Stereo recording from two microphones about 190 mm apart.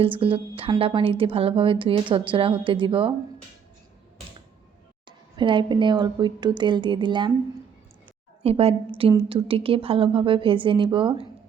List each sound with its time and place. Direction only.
0.0 s a woman's voice: 30° right (ahead or behind)
5.0 s a woman's voice: 25° right (ahead or behind)
8.4 s a woman's voice: 30° right (ahead or behind)